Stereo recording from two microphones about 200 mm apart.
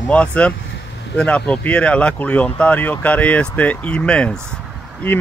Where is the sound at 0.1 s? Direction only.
5° left (ahead or behind).